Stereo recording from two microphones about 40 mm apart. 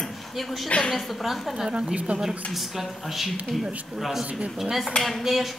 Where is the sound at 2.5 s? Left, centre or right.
Centre.